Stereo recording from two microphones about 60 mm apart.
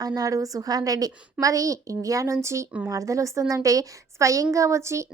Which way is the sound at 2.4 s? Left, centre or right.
Right.